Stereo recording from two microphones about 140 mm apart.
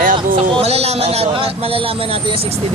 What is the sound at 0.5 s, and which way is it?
Speech, 50° right (ahead or behind).